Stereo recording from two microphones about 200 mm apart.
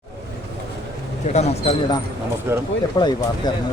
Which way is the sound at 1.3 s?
35° left (ahead or behind).